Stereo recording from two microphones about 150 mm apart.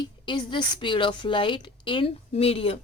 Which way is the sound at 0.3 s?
35° left (ahead or behind).